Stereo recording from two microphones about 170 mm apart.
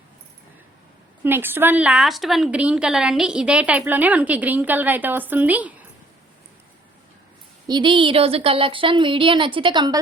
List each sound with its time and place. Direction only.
1.2 s a woman's voice: 10° right (ahead or behind)
7.7 s speech: 30° right (ahead or behind)